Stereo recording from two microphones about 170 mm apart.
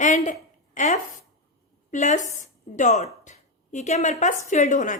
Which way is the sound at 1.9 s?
45° left (ahead or behind).